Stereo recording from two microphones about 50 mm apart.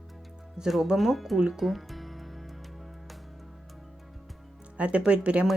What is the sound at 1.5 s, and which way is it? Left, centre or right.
Music, centre.